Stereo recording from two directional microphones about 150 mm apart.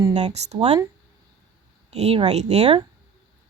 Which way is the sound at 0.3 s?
45° right (ahead or behind).